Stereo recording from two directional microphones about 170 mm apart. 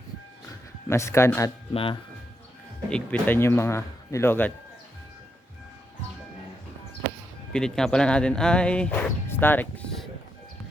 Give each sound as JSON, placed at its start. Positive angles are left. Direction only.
{"t": 0.9, "sound": "speech", "side_deg": 15}
{"t": 1.7, "sound": "speech", "side_deg": 30}
{"t": 2.9, "sound": "speech", "side_deg": 10}
{"t": 7.5, "sound": "speech", "side_deg": 5}